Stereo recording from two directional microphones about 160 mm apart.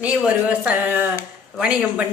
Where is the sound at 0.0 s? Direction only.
5° right (ahead or behind).